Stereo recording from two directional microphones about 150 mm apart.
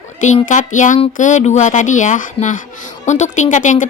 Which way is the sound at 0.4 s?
55° left (ahead or behind).